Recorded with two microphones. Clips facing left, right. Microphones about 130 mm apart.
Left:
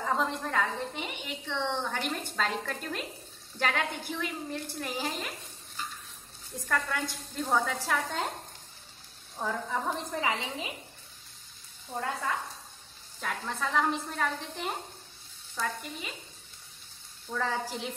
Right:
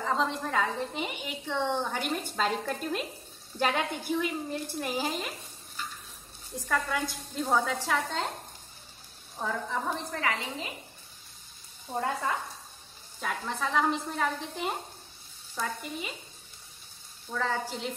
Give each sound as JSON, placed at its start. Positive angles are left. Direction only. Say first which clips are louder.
{"t": 0.0, "sound": "a woman's voice", "louder": "right 1 dB", "side_deg": 5}
{"t": 6.5, "sound": "a woman's voice", "louder": "right 2 dB", "side_deg": -5}
{"t": 9.4, "sound": "a woman's voice", "louder": "even", "side_deg": 5}
{"t": 10.1, "sound": "a woman's voice", "louder": "even", "side_deg": 15}
{"t": 11.9, "sound": "speech", "louder": "right 3 dB", "side_deg": -20}
{"t": 13.2, "sound": "a woman's voice", "louder": "right 1 dB", "side_deg": 0}
{"t": 17.3, "sound": "a woman's voice", "louder": "right 1 dB", "side_deg": 5}